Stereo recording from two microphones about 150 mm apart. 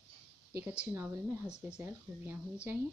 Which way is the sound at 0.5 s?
15° right (ahead or behind).